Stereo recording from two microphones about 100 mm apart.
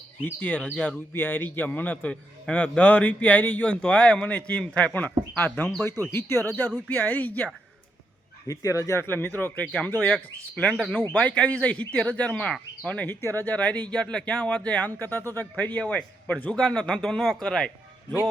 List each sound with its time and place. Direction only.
0.2 s speech: 15° left (ahead or behind)
6.1 s speech: 25° left (ahead or behind)
8.4 s speech: 30° left (ahead or behind); by 17.7 s 5° left (ahead or behind)